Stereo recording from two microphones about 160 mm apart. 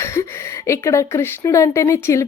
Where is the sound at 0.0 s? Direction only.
15° left (ahead or behind).